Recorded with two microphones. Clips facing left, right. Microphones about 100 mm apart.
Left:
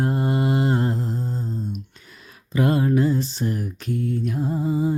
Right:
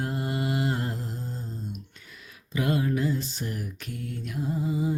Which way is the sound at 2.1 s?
40° left (ahead or behind).